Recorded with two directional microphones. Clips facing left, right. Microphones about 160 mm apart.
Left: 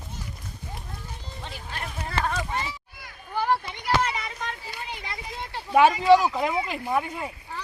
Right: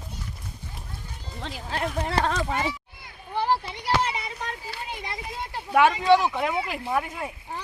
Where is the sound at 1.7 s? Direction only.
80° right.